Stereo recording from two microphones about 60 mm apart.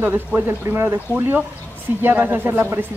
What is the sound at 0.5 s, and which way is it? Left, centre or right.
Speech, right.